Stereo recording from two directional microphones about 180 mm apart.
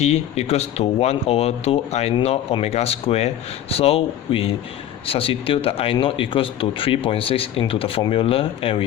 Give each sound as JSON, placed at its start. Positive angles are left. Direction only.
{"t": 0.0, "sound": "speech", "side_deg": 35}